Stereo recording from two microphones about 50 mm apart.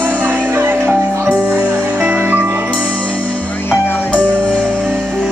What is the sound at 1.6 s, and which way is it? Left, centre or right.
Music, right.